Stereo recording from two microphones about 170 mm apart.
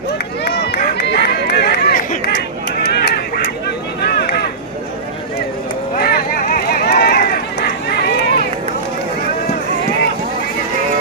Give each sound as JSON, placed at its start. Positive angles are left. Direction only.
{"t": 0.4, "sound": "run", "side_deg": 75}
{"t": 2.8, "sound": "honk", "side_deg": 75}
{"t": 4.0, "sound": "a sound", "side_deg": 75}
{"t": 6.0, "sound": "run", "side_deg": 60}